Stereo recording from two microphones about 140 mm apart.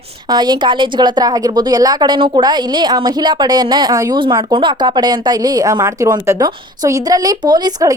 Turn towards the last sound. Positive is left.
turn(degrees=-30)  # may be behind; listen again after turning